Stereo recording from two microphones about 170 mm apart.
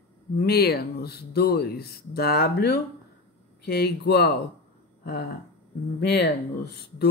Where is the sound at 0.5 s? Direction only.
65° left (ahead or behind).